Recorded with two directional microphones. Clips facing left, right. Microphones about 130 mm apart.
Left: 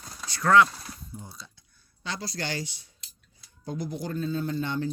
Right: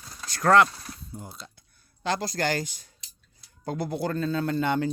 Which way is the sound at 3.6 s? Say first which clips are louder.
Right 4 dB; 65° right (ahead or behind).